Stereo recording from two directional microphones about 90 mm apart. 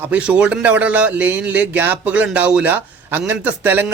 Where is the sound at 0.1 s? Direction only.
15° right (ahead or behind).